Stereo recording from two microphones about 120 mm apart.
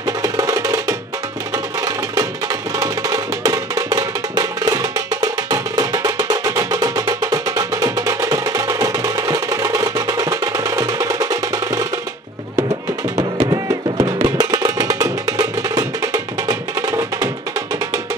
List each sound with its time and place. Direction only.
0.0 s music: 30° right (ahead or behind)
2.8 s music: 30° right (ahead or behind)
13.4 s music: 35° right (ahead or behind)